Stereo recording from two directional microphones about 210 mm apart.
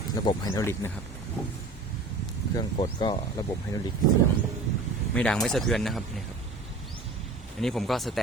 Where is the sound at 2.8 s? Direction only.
20° left (ahead or behind).